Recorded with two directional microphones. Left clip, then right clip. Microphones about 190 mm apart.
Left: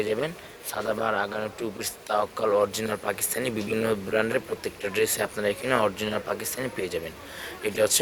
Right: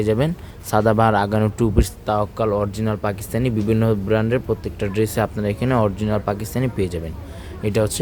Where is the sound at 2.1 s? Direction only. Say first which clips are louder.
Right 1 dB; 10° right (ahead or behind).